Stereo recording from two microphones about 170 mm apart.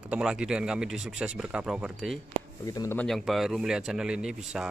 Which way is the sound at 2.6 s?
20° left (ahead or behind).